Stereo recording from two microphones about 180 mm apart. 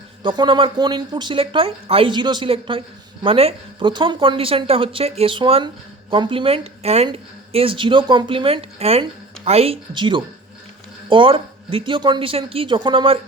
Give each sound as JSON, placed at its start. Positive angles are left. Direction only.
{"t": 0.2, "sound": "a woman's voice", "side_deg": -25}